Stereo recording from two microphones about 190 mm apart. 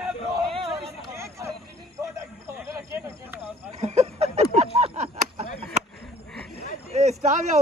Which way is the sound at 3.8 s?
35° right (ahead or behind).